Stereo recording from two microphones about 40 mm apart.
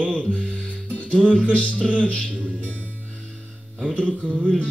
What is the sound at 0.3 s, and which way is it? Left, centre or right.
Music, left.